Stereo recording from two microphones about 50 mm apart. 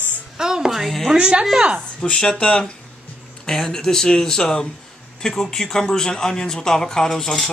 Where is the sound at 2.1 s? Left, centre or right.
Centre.